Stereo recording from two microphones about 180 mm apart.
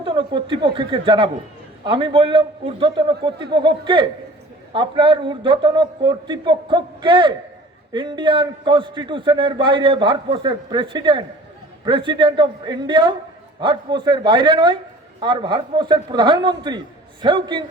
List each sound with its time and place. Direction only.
0.0 s a man's voice: 30° right (ahead or behind)